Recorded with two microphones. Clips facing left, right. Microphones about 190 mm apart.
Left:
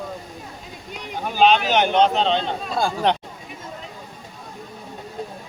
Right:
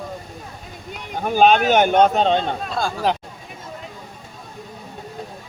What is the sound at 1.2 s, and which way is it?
Speech, 50° right (ahead or behind).